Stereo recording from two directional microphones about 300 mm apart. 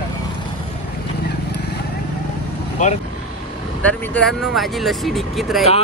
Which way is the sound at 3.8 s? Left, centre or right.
Centre.